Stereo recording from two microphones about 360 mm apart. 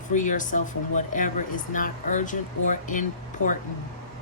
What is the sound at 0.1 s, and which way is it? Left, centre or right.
Speech, left.